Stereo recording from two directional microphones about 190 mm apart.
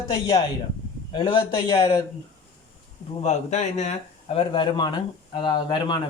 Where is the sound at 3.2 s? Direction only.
35° left (ahead or behind).